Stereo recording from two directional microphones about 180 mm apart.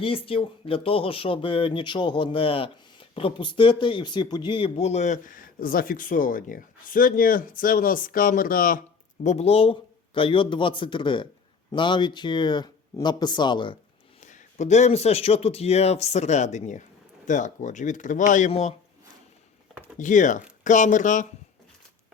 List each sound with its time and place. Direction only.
0.0 s speech: 30° left (ahead or behind); by 8.8 s 50° left (ahead or behind)
9.2 s speech: 35° left (ahead or behind)
14.2 s speech: 40° left (ahead or behind)
20.0 s speech: 45° left (ahead or behind)